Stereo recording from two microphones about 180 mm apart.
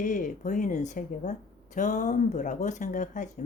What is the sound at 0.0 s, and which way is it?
Speech, 45° left (ahead or behind).